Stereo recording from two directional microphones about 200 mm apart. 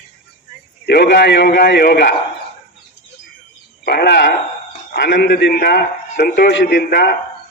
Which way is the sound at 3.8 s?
55° left (ahead or behind).